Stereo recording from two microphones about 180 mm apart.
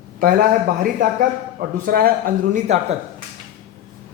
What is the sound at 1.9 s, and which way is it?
Speech, 55° right (ahead or behind).